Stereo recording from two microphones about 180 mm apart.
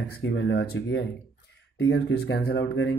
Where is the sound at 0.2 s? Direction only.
80° left.